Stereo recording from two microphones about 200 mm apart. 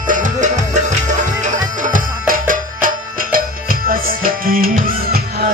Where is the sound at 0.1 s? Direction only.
40° right (ahead or behind).